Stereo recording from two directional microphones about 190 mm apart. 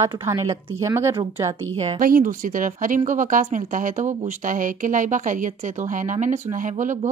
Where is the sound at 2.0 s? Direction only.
45° right (ahead or behind).